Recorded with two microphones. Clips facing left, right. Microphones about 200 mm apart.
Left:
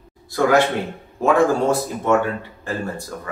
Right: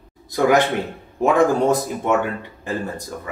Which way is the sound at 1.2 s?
20° right (ahead or behind).